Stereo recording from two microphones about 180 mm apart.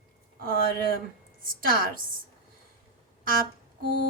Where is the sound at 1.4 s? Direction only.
50° right (ahead or behind).